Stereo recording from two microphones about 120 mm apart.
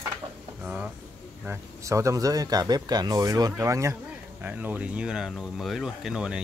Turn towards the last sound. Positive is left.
turn(degrees=-5)  # may be behind; listen again after turning